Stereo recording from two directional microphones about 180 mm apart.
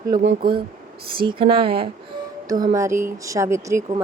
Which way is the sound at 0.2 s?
55° right (ahead or behind).